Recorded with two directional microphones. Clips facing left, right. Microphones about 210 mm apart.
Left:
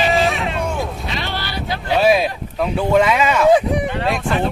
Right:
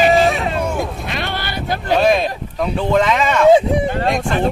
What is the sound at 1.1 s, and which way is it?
Vehicle, 55° right (ahead or behind).